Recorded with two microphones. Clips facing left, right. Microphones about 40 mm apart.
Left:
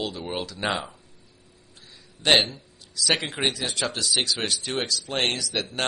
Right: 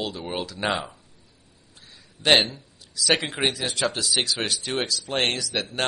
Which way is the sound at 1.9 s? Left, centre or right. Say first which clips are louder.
Right 1 dB; centre.